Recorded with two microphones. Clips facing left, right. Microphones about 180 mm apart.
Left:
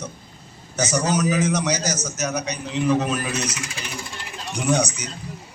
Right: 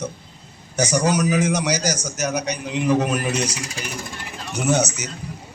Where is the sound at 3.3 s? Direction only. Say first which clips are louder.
Right 3 dB; 30° right (ahead or behind).